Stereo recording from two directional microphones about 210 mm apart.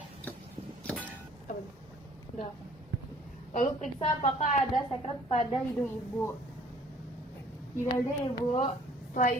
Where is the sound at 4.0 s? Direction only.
35° left (ahead or behind).